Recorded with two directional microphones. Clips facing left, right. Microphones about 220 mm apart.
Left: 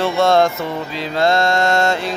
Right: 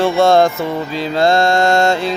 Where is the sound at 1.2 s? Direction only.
30° right (ahead or behind).